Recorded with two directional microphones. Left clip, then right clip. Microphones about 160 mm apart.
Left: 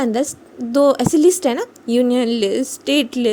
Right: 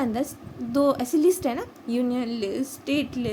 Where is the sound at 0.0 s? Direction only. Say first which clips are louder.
Left 8 dB; 50° left (ahead or behind).